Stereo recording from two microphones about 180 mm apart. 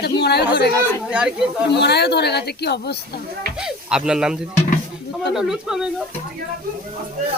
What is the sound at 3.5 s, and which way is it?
Speech, 5° right (ahead or behind).